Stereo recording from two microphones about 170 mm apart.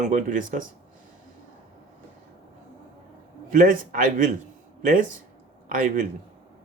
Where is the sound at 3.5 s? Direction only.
50° right (ahead or behind).